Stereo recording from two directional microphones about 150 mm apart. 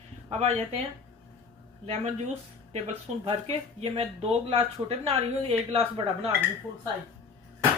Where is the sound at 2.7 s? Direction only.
45° right (ahead or behind).